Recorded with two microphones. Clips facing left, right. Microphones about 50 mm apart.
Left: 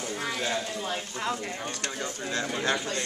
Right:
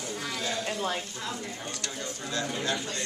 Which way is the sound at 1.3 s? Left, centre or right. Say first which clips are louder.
Left 4 dB; left.